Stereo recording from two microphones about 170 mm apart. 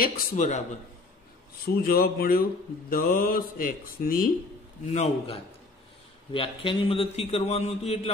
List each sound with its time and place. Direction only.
0.0 s a man's voice: 50° left (ahead or behind)
1.8 s speech: 60° left (ahead or behind)
4.9 s a man's voice: 35° left (ahead or behind)